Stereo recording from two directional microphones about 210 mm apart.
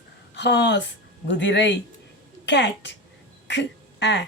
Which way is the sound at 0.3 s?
55° left (ahead or behind).